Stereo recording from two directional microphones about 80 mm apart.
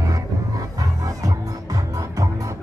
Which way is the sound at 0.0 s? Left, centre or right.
Right.